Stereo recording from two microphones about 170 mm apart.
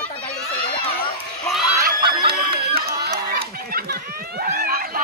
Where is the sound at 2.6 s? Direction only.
65° right (ahead or behind).